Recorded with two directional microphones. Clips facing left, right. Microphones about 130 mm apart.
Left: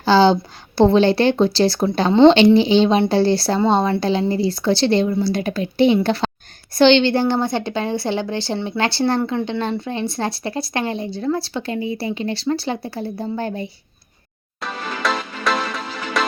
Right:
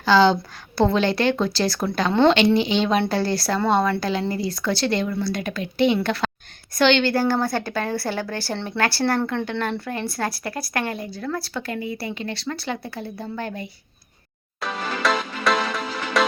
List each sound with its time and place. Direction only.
0.0 s speech: 30° left (ahead or behind)
14.6 s music: centre (ahead or behind)